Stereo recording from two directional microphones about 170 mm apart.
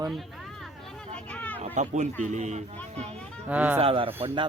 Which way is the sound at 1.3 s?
10° left (ahead or behind).